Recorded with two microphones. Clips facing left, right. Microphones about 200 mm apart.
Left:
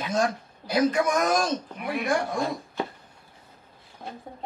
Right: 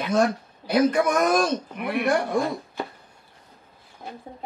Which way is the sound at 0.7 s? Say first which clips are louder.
Right 3 dB; 60° right (ahead or behind).